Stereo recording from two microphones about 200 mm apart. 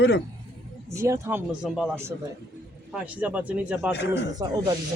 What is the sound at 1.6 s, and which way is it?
A man's voice, centre (ahead or behind).